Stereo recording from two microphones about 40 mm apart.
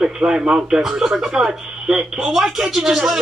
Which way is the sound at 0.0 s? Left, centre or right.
Centre.